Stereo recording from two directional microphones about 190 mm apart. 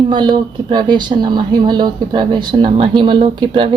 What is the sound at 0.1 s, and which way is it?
Speech, 25° right (ahead or behind).